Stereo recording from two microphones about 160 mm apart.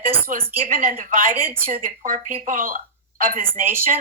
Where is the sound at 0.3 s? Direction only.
55° right (ahead or behind).